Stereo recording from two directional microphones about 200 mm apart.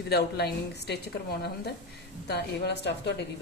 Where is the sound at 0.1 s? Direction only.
55° left (ahead or behind).